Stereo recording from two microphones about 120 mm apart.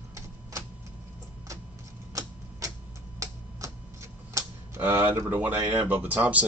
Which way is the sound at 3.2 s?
25° right (ahead or behind).